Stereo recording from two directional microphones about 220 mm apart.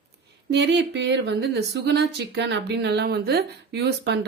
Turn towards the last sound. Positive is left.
turn(degrees=-50)  # may be behind; listen again after turning